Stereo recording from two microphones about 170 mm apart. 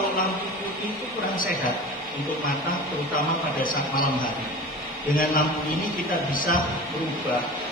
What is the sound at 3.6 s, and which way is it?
Speech, 55° left (ahead or behind).